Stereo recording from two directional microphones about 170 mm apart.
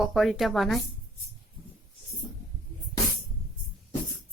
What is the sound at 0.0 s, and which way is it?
Speech, centre (ahead or behind).